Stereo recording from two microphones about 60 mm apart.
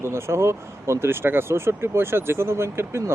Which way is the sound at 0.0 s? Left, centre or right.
Right.